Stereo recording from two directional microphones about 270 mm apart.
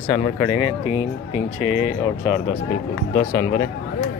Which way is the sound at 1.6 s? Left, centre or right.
Centre.